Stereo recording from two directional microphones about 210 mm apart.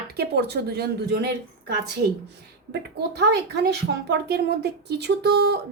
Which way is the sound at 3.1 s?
50° right (ahead or behind).